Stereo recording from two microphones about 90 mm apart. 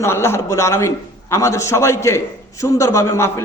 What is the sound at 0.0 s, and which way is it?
A man's voice, 30° left (ahead or behind).